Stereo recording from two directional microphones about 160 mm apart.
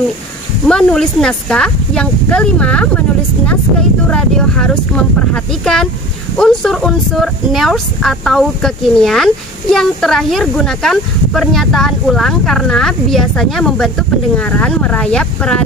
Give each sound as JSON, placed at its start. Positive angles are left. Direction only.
{"t": 0.7, "sound": "speech", "side_deg": 5}
{"t": 4.1, "sound": "speech", "side_deg": 5}